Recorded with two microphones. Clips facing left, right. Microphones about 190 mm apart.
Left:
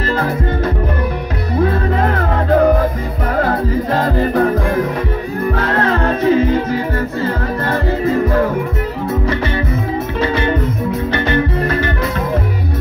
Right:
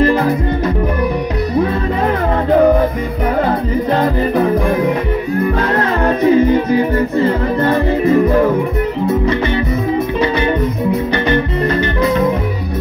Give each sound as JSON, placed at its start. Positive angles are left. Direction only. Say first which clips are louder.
{"t": 6.2, "sound": "music", "louder": "right 3 dB", "side_deg": -15}